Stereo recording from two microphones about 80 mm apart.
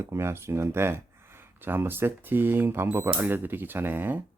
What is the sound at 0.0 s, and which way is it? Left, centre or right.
Speech, right.